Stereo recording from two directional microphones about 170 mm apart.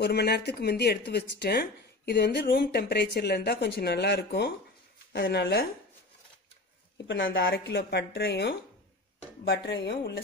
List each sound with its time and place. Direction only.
0.0 s speech: 75° left (ahead or behind)
7.1 s speech: 90° left; by 8.5 s 70° left (ahead or behind)
9.4 s speech: 85° left